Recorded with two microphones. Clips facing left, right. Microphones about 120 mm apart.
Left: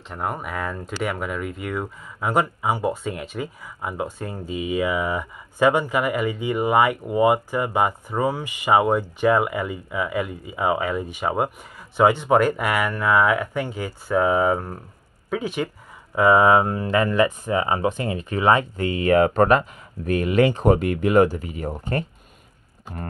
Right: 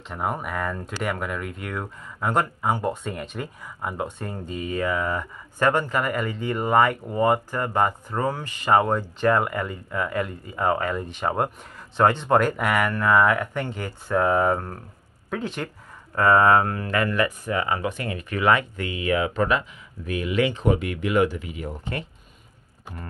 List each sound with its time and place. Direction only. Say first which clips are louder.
0.1 s speech: even; centre (ahead or behind); by 22.0 s 40° left (ahead or behind)